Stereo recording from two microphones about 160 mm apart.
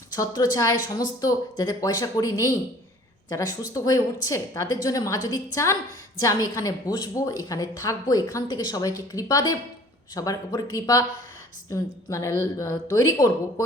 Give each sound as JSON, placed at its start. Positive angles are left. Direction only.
{"t": 0.1, "sound": "a woman's voice", "side_deg": 25}